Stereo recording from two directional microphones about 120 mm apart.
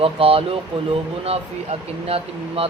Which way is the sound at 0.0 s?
50° right (ahead or behind).